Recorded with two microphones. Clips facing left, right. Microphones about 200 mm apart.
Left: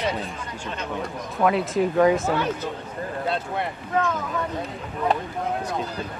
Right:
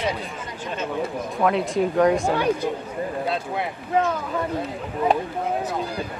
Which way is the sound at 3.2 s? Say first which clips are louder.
Right 1 dB; centre (ahead or behind).